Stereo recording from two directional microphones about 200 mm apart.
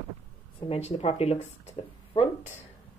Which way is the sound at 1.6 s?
30° left (ahead or behind).